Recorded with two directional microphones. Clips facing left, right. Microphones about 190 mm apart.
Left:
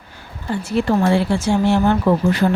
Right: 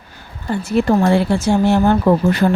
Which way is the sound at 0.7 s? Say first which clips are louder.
Right 3 dB; 45° right (ahead or behind).